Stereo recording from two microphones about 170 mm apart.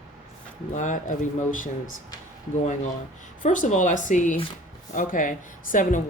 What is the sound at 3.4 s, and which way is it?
A woman's voice, 50° left (ahead or behind).